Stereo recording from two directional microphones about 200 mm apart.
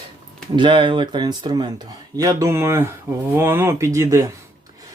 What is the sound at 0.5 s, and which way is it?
Speech, 25° right (ahead or behind).